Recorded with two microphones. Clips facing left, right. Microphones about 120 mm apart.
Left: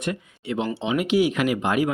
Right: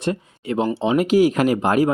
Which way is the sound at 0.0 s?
35° right (ahead or behind).